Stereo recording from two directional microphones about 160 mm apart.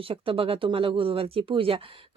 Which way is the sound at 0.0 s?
35° right (ahead or behind).